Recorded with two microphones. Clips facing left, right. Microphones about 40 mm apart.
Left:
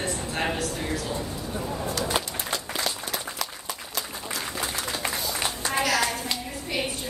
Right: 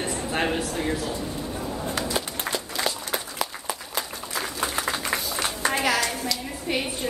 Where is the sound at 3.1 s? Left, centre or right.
Centre.